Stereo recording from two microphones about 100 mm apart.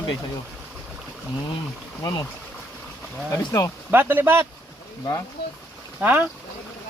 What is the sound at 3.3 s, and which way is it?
Speech, 30° left (ahead or behind).